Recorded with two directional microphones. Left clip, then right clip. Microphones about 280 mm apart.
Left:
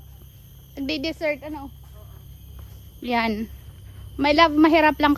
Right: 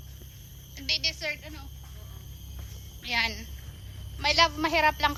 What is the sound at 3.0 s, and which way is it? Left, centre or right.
A woman's voice, left.